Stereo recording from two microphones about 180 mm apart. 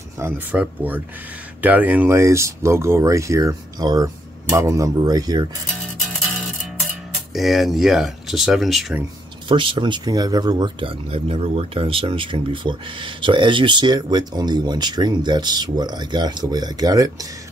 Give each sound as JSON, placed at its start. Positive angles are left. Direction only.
{"t": 0.2, "sound": "speech", "side_deg": -10}
{"t": 7.3, "sound": "speech", "side_deg": 0}
{"t": 9.5, "sound": "speech", "side_deg": -30}